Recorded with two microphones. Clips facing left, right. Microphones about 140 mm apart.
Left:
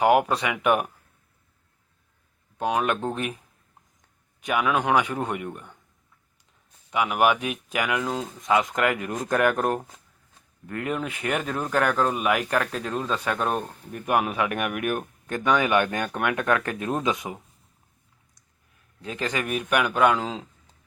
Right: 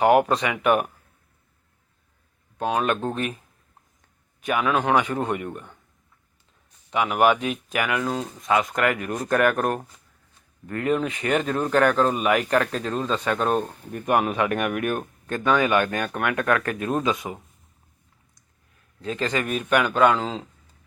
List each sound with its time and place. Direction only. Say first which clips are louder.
0.0 s speech: right 2 dB; 10° left (ahead or behind)
2.6 s speech: right 1 dB; 15° left (ahead or behind)
4.4 s speech: right 1 dB; 15° left (ahead or behind)
6.9 s speech: right 2 dB; 10° left (ahead or behind)
19.0 s speech: right 3 dB; 15° left (ahead or behind)